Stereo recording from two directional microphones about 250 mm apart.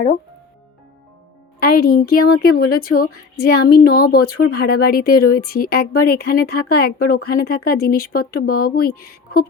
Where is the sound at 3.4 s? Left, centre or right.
Left.